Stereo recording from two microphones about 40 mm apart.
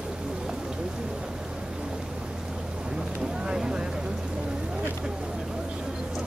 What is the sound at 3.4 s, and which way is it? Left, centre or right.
Vehicle, centre.